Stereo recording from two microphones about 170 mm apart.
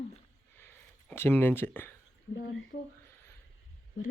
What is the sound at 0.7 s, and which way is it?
Speech, 15° left (ahead or behind).